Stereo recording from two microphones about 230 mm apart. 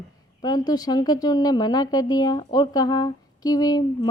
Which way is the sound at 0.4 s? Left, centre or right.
Centre.